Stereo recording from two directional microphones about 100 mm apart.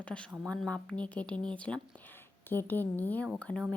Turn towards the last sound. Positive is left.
turn(degrees=15)  # may be behind; listen again after turning